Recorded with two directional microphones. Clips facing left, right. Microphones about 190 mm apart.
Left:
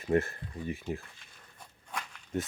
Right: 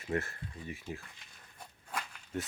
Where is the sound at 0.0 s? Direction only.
30° left (ahead or behind).